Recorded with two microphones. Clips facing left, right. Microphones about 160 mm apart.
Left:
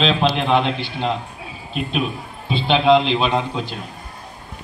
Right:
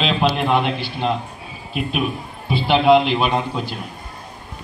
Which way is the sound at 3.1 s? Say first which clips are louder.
Even; 10° right (ahead or behind).